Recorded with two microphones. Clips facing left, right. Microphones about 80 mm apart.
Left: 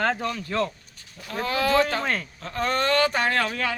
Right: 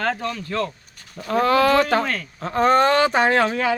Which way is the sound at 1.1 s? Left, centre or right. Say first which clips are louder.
Right 10 dB; right.